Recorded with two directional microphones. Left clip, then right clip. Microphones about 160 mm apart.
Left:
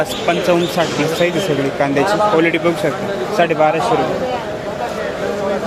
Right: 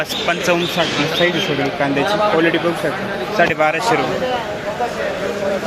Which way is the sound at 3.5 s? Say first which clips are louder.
Left 2 dB; 5° right (ahead or behind).